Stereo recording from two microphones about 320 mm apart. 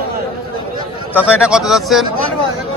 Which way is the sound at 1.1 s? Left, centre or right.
Centre.